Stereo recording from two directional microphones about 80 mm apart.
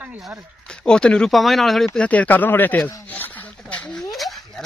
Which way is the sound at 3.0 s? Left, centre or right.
Left.